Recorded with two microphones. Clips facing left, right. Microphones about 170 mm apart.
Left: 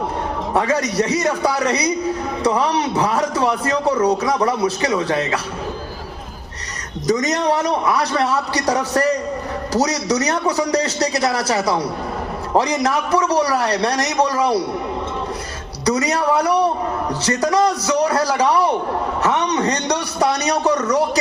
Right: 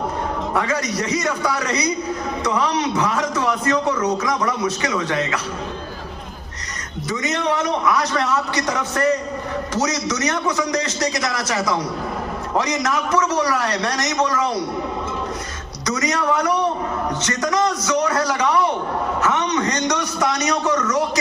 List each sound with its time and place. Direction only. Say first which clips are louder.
0.5 s a man's voice: left 6 dB; 30° left (ahead or behind)
7.1 s a man's voice: left 5 dB; 40° left (ahead or behind)
15.9 s a man's voice: left 3 dB; 30° left (ahead or behind)
19.2 s a sound: left 3 dB; 35° left (ahead or behind)